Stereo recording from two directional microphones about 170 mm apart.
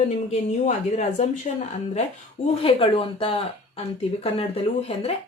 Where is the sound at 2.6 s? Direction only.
35° left (ahead or behind).